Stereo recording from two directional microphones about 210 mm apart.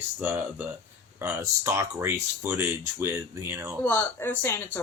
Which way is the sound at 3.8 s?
10° left (ahead or behind).